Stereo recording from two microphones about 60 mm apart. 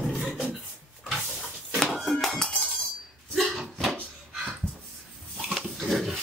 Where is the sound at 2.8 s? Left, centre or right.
Centre.